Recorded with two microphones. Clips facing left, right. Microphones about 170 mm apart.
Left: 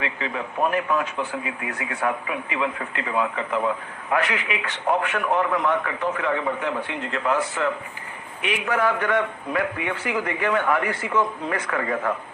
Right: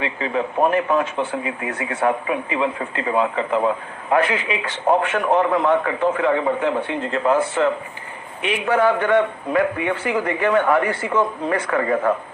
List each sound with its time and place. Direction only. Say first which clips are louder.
0.0 s a man's voice: right 6 dB; 30° right (ahead or behind)